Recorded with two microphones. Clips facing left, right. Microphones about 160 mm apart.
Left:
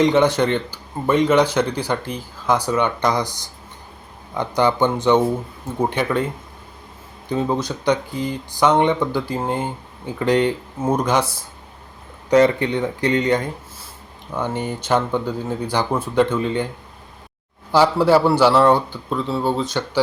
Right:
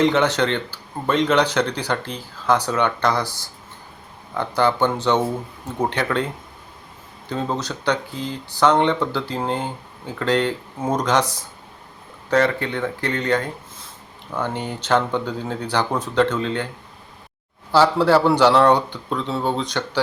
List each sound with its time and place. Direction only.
0.0 s speech: 15° left (ahead or behind)
7.3 s speech: 10° left (ahead or behind)
17.7 s speech: 15° left (ahead or behind)